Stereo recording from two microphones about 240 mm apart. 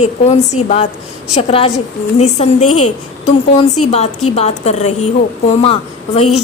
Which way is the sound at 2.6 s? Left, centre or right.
Left.